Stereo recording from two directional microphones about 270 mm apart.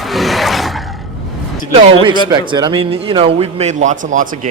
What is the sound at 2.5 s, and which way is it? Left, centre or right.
Speech, centre.